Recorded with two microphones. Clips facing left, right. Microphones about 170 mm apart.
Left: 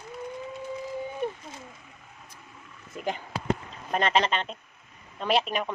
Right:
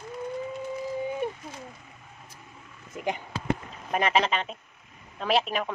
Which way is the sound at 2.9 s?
15° right (ahead or behind).